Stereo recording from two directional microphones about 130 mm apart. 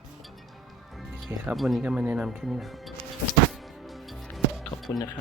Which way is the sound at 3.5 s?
Centre (ahead or behind).